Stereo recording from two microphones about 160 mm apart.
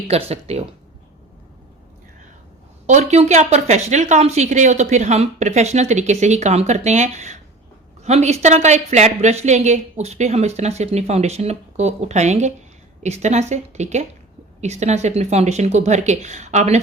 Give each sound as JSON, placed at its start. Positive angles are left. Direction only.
{"t": 0.1, "sound": "speech", "side_deg": -40}
{"t": 2.8, "sound": "speech", "side_deg": -45}